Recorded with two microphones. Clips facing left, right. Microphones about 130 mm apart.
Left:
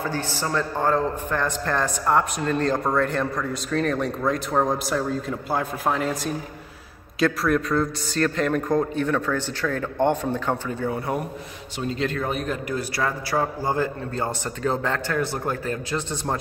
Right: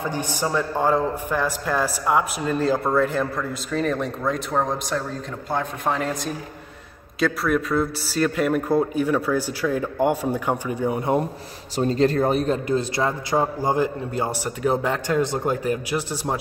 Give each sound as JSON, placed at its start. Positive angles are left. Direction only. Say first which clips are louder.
{"t": 0.0, "sound": "a man's voice", "louder": "right 2 dB", "side_deg": -15}
{"t": 11.7, "sound": "a man's voice", "louder": "right 7 dB", "side_deg": -40}